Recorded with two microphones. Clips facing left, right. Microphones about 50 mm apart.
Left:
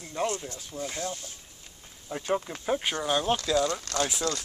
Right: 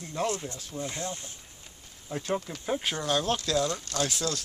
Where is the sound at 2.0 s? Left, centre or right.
Centre.